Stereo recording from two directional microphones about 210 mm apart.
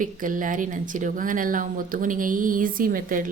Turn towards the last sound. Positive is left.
turn(degrees=-40)  # may be behind; listen again after turning